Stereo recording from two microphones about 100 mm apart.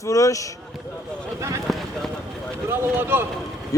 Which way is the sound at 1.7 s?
5° left (ahead or behind).